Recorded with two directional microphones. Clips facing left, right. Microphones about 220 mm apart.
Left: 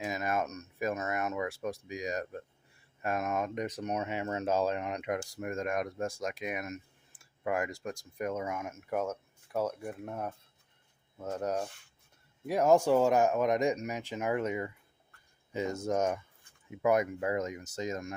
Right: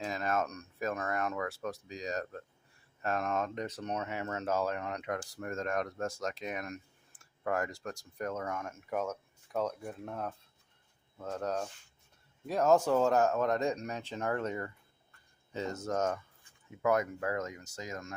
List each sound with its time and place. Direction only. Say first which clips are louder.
0.0 s speech: left 1 dB; 10° left (ahead or behind)
4.0 s speech: left 3 dB; 25° left (ahead or behind)